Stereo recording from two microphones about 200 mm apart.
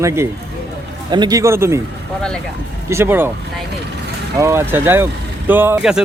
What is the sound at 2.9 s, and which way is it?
Speech, 10° right (ahead or behind).